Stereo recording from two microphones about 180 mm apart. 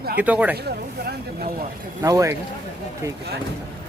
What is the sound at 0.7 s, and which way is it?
Speech, 60° right (ahead or behind).